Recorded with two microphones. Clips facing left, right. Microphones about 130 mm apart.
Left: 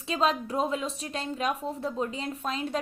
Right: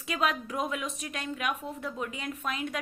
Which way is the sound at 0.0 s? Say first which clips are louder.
Left 3 dB; 30° left (ahead or behind).